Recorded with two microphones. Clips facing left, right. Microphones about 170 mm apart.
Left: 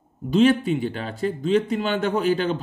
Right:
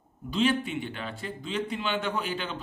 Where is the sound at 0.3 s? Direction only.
45° left (ahead or behind).